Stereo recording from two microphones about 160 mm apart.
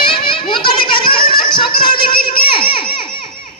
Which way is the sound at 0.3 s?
30° left (ahead or behind).